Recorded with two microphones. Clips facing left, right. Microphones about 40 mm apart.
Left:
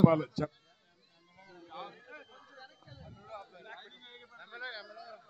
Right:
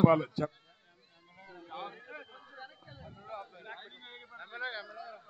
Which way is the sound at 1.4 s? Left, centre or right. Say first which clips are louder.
Right 3 dB; centre.